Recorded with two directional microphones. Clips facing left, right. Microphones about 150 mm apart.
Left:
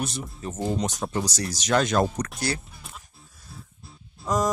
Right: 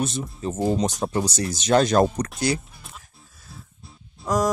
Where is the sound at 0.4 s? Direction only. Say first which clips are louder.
Right 5 dB; 30° right (ahead or behind).